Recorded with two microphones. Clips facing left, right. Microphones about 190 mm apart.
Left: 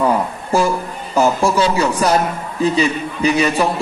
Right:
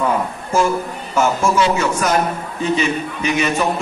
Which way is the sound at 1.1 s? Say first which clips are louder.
Left 2 dB; 35° left (ahead or behind).